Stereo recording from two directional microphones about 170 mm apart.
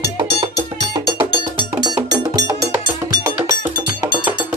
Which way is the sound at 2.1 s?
20° right (ahead or behind).